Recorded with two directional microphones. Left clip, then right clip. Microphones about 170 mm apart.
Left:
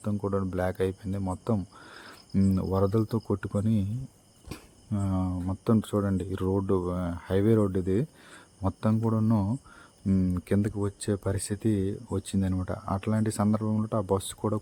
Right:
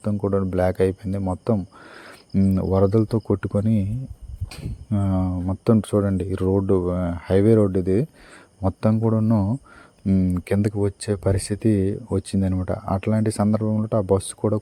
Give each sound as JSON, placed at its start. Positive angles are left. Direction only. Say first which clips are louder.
{"t": 0.0, "sound": "speech", "louder": "right 7 dB", "side_deg": -30}